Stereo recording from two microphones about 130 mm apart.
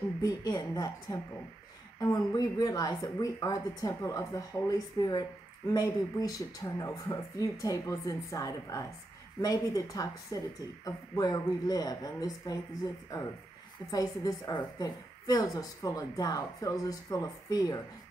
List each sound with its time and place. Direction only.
0.2 s a woman's voice: 30° left (ahead or behind)
13.8 s a woman's voice: 30° left (ahead or behind)